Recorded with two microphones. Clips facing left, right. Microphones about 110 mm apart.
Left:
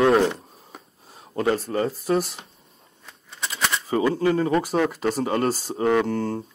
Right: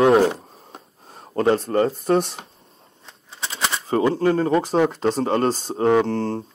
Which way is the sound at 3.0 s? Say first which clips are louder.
Even; 30° right (ahead or behind).